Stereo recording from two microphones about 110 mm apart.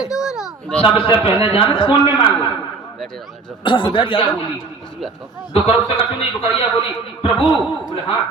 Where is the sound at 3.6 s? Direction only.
50° left (ahead or behind).